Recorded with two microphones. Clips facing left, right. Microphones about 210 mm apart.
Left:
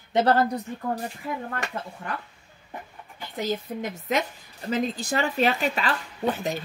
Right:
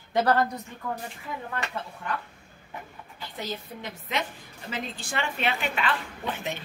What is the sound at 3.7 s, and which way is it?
Speech, 50° left (ahead or behind).